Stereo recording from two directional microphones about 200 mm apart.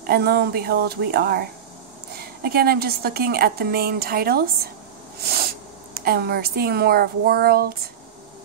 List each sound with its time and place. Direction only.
0.0 s a woman's voice: 50° right (ahead or behind)
2.4 s a woman's voice: 50° right (ahead or behind)
5.9 s a woman's voice: 50° right (ahead or behind)